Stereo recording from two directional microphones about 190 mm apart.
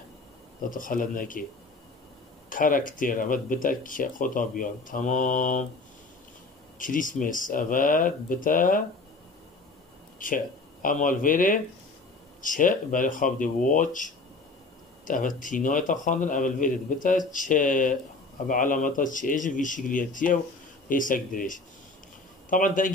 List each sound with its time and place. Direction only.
0.6 s speech: 45° left (ahead or behind)
2.5 s speech: 45° left (ahead or behind)
6.8 s speech: 45° left (ahead or behind)
10.1 s speech: 45° left (ahead or behind)